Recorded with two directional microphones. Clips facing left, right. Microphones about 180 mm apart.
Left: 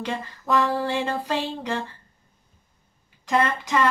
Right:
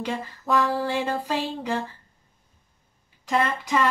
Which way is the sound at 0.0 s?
5° right (ahead or behind).